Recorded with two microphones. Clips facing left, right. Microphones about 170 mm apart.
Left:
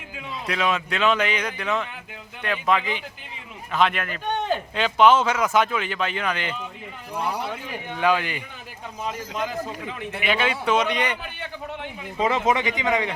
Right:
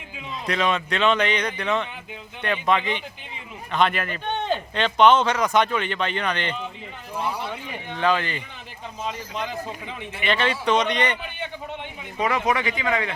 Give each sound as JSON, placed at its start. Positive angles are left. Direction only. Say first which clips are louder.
{"t": 0.4, "sound": "speech", "louder": "right 1 dB", "side_deg": 5}
{"t": 12.5, "sound": "speech", "louder": "left 1 dB", "side_deg": 20}